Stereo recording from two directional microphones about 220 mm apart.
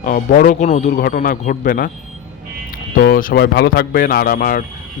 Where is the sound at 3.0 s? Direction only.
40° left (ahead or behind).